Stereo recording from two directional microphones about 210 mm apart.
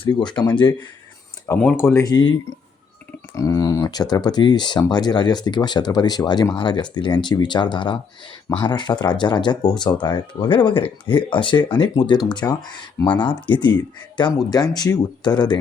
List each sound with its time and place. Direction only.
0.0 s speech: 20° left (ahead or behind)
1.5 s speech: 10° left (ahead or behind)
3.3 s speech: 15° left (ahead or behind)